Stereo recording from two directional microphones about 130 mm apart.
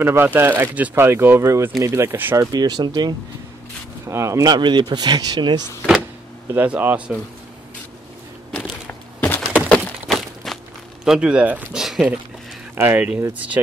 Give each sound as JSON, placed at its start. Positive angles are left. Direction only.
{"t": 0.0, "sound": "speech", "side_deg": -15}
{"t": 6.5, "sound": "speech", "side_deg": -15}
{"t": 8.5, "sound": "a sound", "side_deg": 0}
{"t": 11.1, "sound": "speech", "side_deg": -5}